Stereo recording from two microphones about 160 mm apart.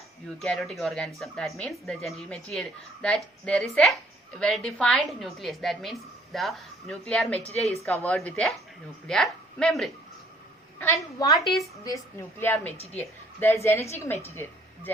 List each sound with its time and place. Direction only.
0.4 s a woman's voice: centre (ahead or behind)
8.1 s a woman's voice: 5° left (ahead or behind)
11.2 s a woman's voice: 25° left (ahead or behind)
12.4 s a woman's voice: 10° left (ahead or behind)
12.7 s a woman's voice: 40° left (ahead or behind)
13.0 s a woman's voice: 15° left (ahead or behind)